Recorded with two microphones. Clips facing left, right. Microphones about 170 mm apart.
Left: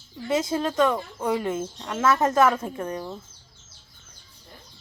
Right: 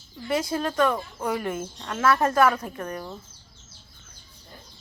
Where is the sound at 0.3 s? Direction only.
20° left (ahead or behind).